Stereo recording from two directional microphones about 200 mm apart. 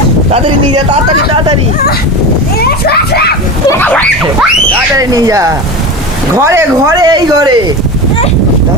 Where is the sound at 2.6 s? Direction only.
55° left (ahead or behind).